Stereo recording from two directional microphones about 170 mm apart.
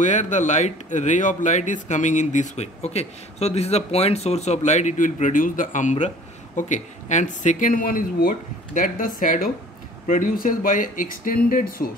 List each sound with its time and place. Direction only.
0.0 s speech: 45° left (ahead or behind)